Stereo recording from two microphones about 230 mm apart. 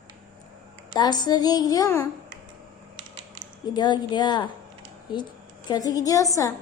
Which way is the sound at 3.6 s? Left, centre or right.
Centre.